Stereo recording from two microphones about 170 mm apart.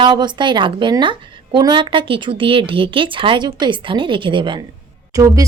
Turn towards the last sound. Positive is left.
turn(degrees=-20)  # may be behind; listen again after turning